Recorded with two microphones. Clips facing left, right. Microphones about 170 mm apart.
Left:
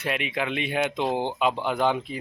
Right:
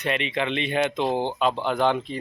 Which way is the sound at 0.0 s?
5° left (ahead or behind).